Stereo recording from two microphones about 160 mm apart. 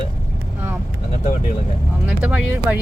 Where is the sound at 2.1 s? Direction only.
10° right (ahead or behind).